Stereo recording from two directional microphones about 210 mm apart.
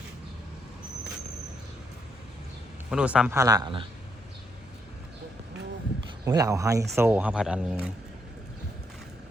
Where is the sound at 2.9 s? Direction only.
5° right (ahead or behind); by 3.9 s 25° right (ahead or behind).